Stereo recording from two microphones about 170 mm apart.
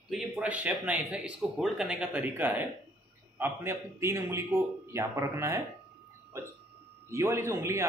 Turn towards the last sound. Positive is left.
turn(degrees=-15)  # may be behind; listen again after turning